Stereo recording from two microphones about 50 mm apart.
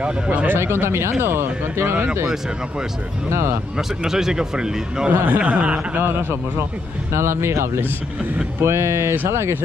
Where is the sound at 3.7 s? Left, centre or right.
Centre.